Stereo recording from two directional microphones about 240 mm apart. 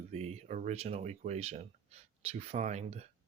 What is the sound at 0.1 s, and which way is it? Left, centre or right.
Speech, right.